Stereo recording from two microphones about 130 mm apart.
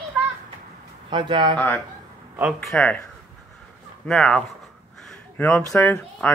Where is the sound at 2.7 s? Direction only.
10° left (ahead or behind).